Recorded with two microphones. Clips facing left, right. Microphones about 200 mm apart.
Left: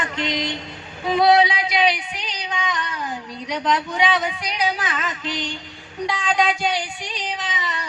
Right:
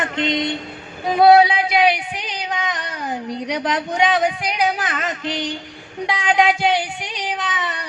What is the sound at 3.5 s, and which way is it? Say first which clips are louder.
A woman's voice: left 1 dB; 55° right (ahead or behind).